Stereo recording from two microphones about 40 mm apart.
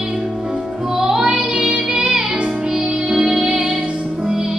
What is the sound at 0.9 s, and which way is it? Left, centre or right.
Music, centre.